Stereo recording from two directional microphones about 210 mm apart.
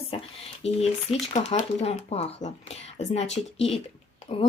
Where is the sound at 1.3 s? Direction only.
30° left (ahead or behind).